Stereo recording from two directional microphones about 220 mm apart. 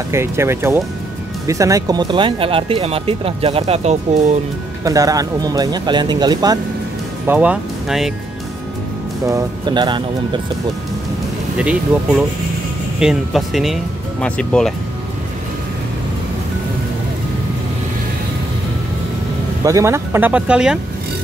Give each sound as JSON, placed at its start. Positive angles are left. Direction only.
{"t": 0.1, "sound": "speech", "side_deg": -10}
{"t": 4.8, "sound": "speech", "side_deg": -15}
{"t": 7.2, "sound": "speech", "side_deg": -5}
{"t": 9.2, "sound": "speech", "side_deg": -15}
{"t": 13.0, "sound": "speech", "side_deg": 0}
{"t": 19.6, "sound": "speech", "side_deg": -15}